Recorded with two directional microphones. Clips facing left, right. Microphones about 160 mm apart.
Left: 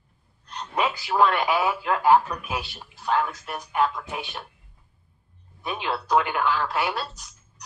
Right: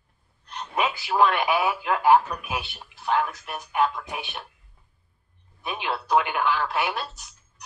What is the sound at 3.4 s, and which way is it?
A man's voice, 20° right (ahead or behind).